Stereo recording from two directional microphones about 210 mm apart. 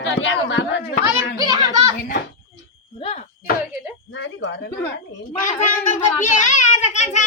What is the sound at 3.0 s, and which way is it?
Speech, 30° left (ahead or behind).